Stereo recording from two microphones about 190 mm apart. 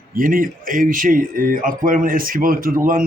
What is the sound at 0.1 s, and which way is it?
Speech, 45° right (ahead or behind).